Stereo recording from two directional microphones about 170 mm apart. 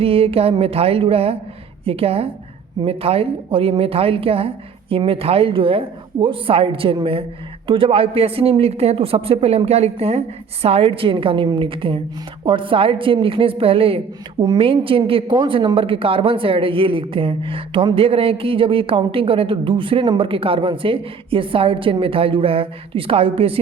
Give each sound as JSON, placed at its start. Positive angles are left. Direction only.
{"t": 0.0, "sound": "a woman's voice", "side_deg": -35}